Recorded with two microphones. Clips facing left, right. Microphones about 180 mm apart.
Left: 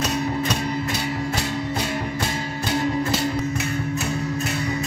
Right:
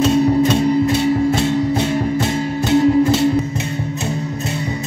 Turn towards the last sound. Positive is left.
turn(degrees=-25)  # may be behind; listen again after turning